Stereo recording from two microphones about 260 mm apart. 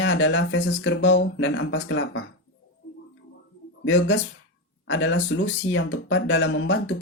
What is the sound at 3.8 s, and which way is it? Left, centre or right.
Speech, left.